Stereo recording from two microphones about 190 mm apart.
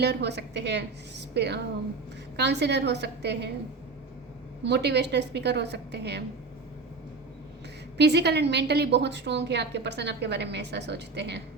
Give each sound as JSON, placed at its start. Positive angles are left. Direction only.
{"t": 0.0, "sound": "a woman's voice", "side_deg": -60}
{"t": 4.6, "sound": "a woman's voice", "side_deg": -65}
{"t": 7.9, "sound": "a woman's voice", "side_deg": -60}